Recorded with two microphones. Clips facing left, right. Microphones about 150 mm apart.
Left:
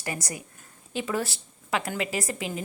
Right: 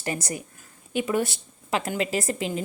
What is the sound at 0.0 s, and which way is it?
A woman's voice, 25° right (ahead or behind).